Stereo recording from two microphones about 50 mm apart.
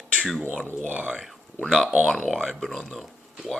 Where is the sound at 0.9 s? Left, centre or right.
Right.